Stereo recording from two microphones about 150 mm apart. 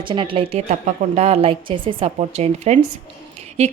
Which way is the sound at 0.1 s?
35° right (ahead or behind).